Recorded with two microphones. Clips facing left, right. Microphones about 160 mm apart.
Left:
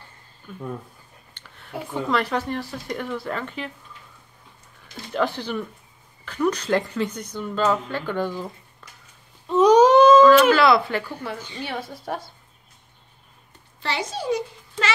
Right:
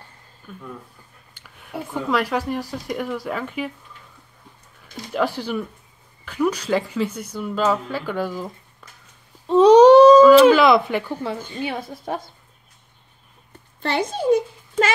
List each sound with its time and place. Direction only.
0.5 s speech: centre (ahead or behind)
4.9 s speech: 10° right (ahead or behind)
8.8 s a sound: 10° right (ahead or behind)
9.5 s a sound: 30° right (ahead or behind)
10.5 s speech: 15° right (ahead or behind)
13.7 s a child's voice: 55° right (ahead or behind)